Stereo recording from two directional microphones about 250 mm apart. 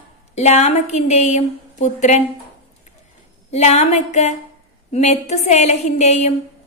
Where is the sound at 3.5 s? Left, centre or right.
Left.